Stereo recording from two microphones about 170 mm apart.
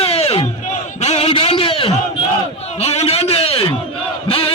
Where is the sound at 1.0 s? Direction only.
40° left (ahead or behind).